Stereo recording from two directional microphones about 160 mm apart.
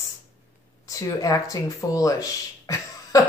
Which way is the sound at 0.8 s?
20° left (ahead or behind).